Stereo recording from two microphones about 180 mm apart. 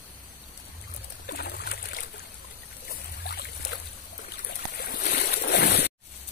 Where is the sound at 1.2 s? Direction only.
60° left (ahead or behind).